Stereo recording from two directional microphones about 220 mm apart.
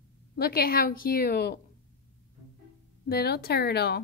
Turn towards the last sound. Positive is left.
turn(degrees=50)  # may be behind; listen again after turning